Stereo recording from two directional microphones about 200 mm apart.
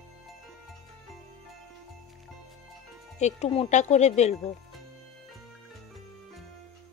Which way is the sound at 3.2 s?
35° left (ahead or behind).